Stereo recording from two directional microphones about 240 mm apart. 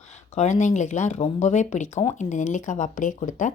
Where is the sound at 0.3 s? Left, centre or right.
Left.